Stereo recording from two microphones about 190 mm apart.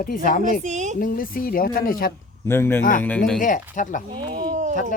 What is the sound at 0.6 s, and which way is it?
Speech, 40° right (ahead or behind).